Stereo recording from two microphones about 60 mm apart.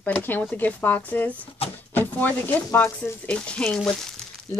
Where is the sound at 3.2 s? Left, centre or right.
Centre.